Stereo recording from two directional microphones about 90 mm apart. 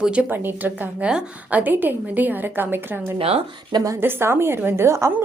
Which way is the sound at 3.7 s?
40° right (ahead or behind).